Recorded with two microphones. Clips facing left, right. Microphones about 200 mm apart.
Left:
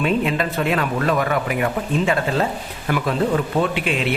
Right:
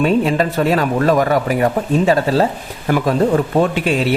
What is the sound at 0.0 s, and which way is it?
Speech, 40° right (ahead or behind).